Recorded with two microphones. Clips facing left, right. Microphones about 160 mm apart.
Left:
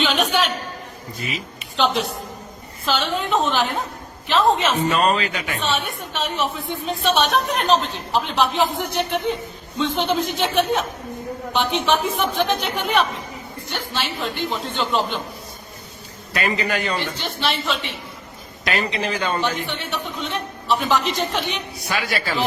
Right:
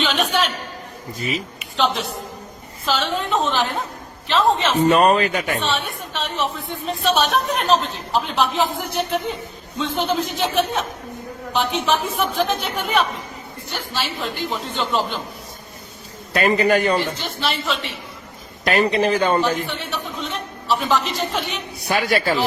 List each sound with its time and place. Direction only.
0.0 s a sound: centre (ahead or behind)
1.7 s a woman's voice: centre (ahead or behind)
4.9 s a man's voice: 50° right (ahead or behind)
5.6 s a woman's voice: centre (ahead or behind)
16.3 s a man's voice: 45° right (ahead or behind)
17.0 s a woman's voice: centre (ahead or behind)
18.6 s a man's voice: 50° right (ahead or behind)
19.6 s a woman's voice: centre (ahead or behind)
21.9 s a man's voice: 50° right (ahead or behind)